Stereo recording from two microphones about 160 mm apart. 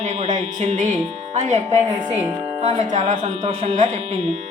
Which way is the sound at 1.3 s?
45° right (ahead or behind).